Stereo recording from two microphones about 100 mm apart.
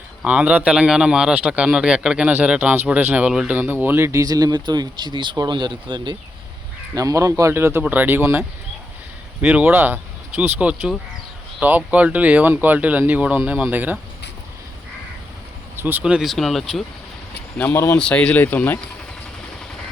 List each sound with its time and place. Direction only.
0.3 s a man's voice: 15° right (ahead or behind); by 6.1 s 50° right (ahead or behind)
6.9 s a man's voice: 35° right (ahead or behind); by 14.0 s 15° right (ahead or behind)
15.7 s speech: 20° right (ahead or behind)
16.3 s speech: centre (ahead or behind)
17.9 s speech: 10° left (ahead or behind)